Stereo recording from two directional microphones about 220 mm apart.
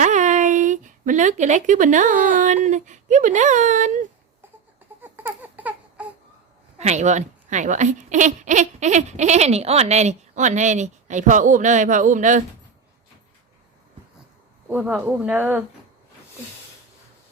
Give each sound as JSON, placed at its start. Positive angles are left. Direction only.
{"t": 0.0, "sound": "a sound", "side_deg": -35}
{"t": 2.6, "sound": "speech", "side_deg": -35}
{"t": 5.0, "sound": "baby cry", "side_deg": -10}
{"t": 6.7, "sound": "speech", "side_deg": -30}
{"t": 14.7, "sound": "speech", "side_deg": -10}